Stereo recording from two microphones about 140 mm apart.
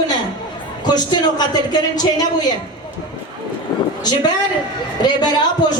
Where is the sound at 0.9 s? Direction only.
30° left (ahead or behind).